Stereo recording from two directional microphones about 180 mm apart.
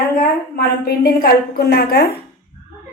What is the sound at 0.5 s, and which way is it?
A woman's voice, 60° left (ahead or behind).